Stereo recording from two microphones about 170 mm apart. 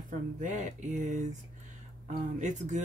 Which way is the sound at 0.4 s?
50° right (ahead or behind).